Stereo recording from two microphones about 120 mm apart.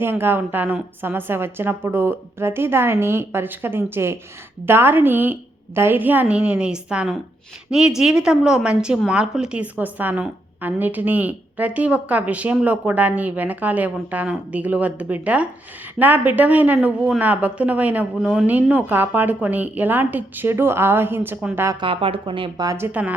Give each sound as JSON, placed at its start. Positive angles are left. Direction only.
{"t": 0.0, "sound": "a woman's voice", "side_deg": -20}
{"t": 21.8, "sound": "a woman's voice", "side_deg": -50}
{"t": 22.6, "sound": "a woman's voice", "side_deg": -30}
{"t": 22.9, "sound": "a woman's voice", "side_deg": -10}